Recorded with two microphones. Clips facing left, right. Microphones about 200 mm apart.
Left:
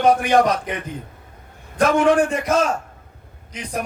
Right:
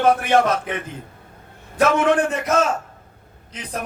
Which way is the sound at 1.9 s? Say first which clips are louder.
Left 2 dB; 10° left (ahead or behind).